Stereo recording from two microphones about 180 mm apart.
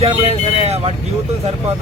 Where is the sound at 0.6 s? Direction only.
35° right (ahead or behind).